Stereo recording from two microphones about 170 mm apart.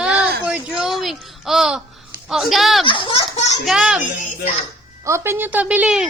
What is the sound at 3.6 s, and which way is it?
Speech, 5° right (ahead or behind).